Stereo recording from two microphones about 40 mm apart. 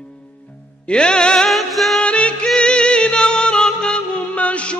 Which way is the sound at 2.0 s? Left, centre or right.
Left.